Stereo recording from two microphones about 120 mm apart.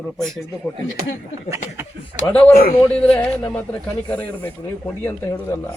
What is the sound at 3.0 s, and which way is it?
Speech, 15° left (ahead or behind).